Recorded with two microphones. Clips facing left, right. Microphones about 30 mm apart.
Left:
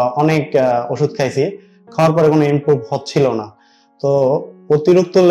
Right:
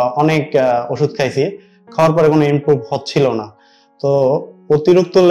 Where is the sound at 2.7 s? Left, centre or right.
Right.